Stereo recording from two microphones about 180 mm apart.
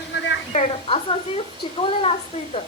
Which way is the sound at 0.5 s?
40° left (ahead or behind).